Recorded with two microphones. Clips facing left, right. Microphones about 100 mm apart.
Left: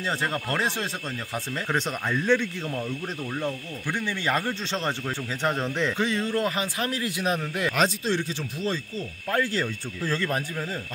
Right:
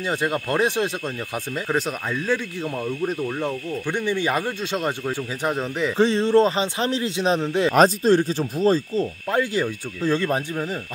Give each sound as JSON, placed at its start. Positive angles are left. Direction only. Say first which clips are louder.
{"t": 0.0, "sound": "speech", "louder": "right 4 dB", "side_deg": -15}
{"t": 1.7, "sound": "speech", "louder": "right 2 dB", "side_deg": -5}
{"t": 2.8, "sound": "speech", "louder": "right 7 dB", "side_deg": -15}
{"t": 5.9, "sound": "a man's voice", "louder": "right 9 dB", "side_deg": -30}
{"t": 7.7, "sound": "speech", "louder": "right 10 dB", "side_deg": -40}
{"t": 9.3, "sound": "a man's voice", "louder": "right 2 dB", "side_deg": -15}